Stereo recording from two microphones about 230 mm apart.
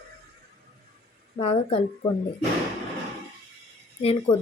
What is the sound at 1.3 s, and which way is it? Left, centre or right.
Speech, left.